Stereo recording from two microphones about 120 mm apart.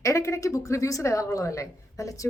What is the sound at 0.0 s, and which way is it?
A woman's voice, 25° left (ahead or behind).